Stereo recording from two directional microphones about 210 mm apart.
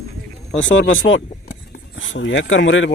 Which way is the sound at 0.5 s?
60° left (ahead or behind).